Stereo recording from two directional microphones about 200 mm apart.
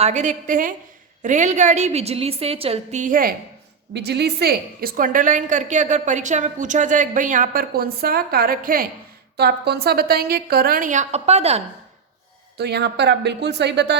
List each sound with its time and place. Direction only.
0.0 s a woman's voice: 35° right (ahead or behind)
3.9 s a woman's voice: 55° right (ahead or behind); by 11.6 s 30° right (ahead or behind)
12.5 s speech: 55° right (ahead or behind)